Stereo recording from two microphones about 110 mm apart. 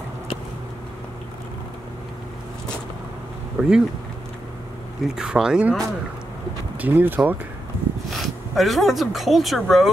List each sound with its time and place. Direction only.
3.6 s speech: 15° right (ahead or behind)
5.0 s speech: 5° right (ahead or behind)
6.8 s speech: 20° right (ahead or behind)
8.1 s speech: centre (ahead or behind)